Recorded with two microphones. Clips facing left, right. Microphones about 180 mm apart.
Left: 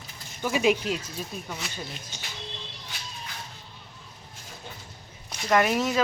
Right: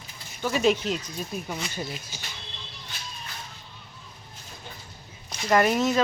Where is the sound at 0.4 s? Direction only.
10° left (ahead or behind).